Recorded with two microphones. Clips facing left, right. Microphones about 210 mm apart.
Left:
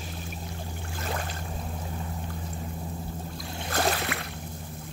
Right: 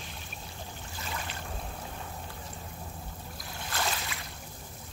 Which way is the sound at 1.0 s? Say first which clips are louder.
Left 6 dB; 50° left (ahead or behind).